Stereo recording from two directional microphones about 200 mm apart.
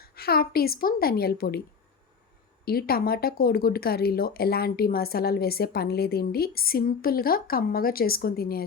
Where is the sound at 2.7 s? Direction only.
50° left (ahead or behind).